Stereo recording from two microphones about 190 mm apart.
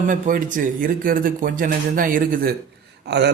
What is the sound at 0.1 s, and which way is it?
A man's voice, 45° right (ahead or behind).